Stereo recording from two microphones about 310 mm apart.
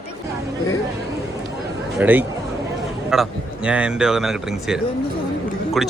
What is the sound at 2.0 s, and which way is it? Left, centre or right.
A man's voice, centre.